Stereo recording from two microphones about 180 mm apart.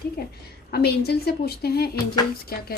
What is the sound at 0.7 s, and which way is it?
A woman's voice, 60° left (ahead or behind).